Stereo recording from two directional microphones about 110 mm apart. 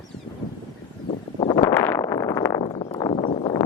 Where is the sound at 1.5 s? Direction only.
35° left (ahead or behind).